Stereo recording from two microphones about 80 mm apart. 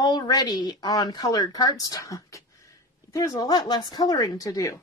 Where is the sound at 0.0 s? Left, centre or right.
Left.